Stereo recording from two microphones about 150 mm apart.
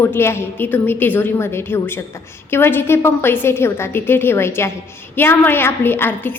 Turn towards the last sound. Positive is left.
turn(degrees=15)  # may be behind; listen again after turning